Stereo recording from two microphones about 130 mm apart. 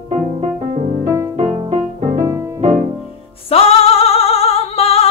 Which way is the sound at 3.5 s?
50° left (ahead or behind).